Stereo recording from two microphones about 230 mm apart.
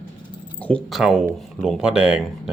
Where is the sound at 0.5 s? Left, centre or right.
Centre.